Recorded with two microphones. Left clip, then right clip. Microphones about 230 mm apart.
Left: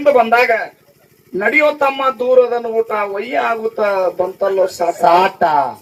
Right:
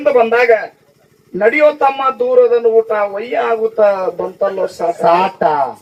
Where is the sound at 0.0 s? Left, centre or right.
Left.